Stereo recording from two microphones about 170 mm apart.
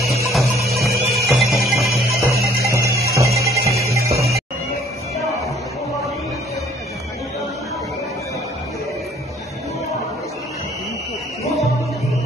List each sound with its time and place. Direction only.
0.3 s music: centre (ahead or behind)
2.6 s music: 15° right (ahead or behind)